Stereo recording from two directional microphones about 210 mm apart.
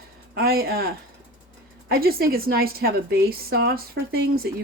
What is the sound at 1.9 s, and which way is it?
Speech, 45° right (ahead or behind).